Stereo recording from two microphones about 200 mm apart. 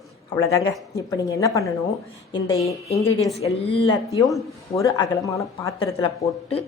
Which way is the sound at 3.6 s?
60° left (ahead or behind).